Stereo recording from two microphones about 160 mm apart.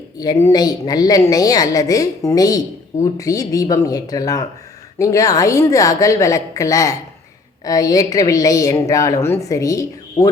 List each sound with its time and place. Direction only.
0.2 s a woman's voice: 25° left (ahead or behind)